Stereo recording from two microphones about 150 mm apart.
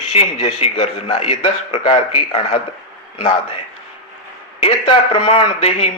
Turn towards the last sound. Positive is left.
turn(degrees=40)  # may be behind; listen again after turning